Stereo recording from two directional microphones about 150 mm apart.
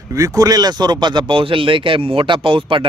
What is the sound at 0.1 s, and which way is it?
Speech, 25° right (ahead or behind).